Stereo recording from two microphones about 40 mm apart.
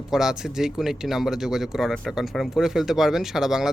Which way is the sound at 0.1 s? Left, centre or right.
Centre.